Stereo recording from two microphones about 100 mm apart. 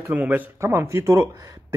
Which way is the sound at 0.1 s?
20° right (ahead or behind).